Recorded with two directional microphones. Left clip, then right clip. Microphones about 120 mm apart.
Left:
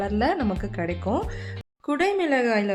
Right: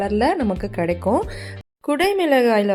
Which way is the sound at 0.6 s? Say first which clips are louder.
Right 7 dB; 45° right (ahead or behind).